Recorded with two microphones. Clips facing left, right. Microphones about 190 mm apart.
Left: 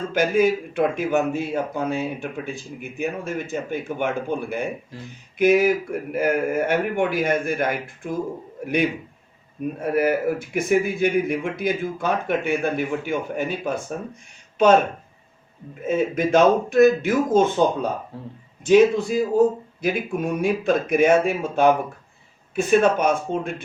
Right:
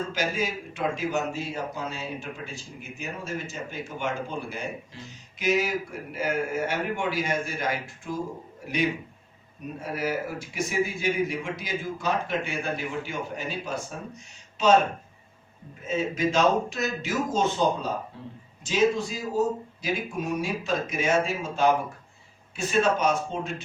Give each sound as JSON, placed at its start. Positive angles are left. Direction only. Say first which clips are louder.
{"t": 0.1, "sound": "a man's voice", "louder": "left 10 dB", "side_deg": 55}
{"t": 9.8, "sound": "a man's voice", "louder": "left 9 dB", "side_deg": 55}
{"t": 15.9, "sound": "a man's voice", "louder": "left 6 dB", "side_deg": 55}
{"t": 18.1, "sound": "a man's voice", "louder": "left 5 dB", "side_deg": 40}
{"t": 18.6, "sound": "a man's voice", "louder": "left 8 dB", "side_deg": 55}